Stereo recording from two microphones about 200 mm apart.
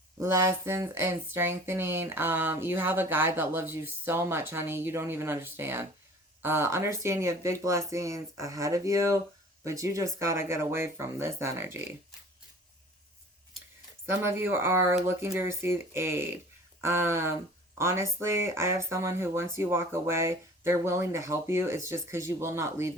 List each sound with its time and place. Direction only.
0.2 s speech: 15° right (ahead or behind)
14.1 s speech: 10° right (ahead or behind)